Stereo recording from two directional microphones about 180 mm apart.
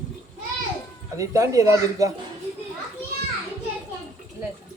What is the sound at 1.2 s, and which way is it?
Speech, 20° right (ahead or behind).